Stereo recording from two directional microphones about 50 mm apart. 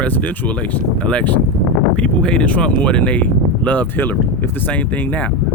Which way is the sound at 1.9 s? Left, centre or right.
Left.